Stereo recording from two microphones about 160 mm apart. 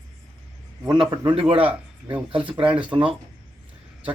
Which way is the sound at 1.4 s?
35° right (ahead or behind).